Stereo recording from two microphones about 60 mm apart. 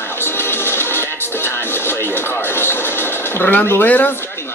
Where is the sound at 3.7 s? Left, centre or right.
Left.